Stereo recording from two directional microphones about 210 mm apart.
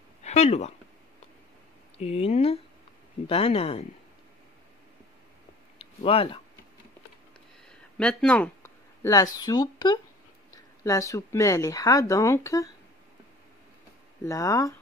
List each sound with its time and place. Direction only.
0.2 s speech: 30° left (ahead or behind)
2.0 s speech: 30° left (ahead or behind)
5.8 s speech: 25° left (ahead or behind)
8.0 s speech: 5° left (ahead or behind)
14.2 s speech: 15° left (ahead or behind)